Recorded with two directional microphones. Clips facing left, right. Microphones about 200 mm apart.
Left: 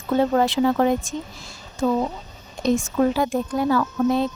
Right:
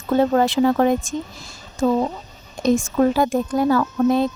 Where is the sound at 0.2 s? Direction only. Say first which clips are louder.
Right 2 dB; 45° right (ahead or behind).